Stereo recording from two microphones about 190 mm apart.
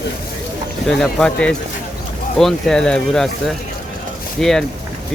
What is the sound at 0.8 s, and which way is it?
Speech, 5° left (ahead or behind).